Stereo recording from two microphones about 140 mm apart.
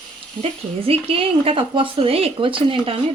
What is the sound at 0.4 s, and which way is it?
Speech, 45° right (ahead or behind).